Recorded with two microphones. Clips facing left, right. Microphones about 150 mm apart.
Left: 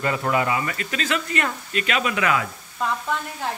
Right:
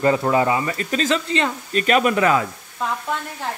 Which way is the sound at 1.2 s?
25° right (ahead or behind).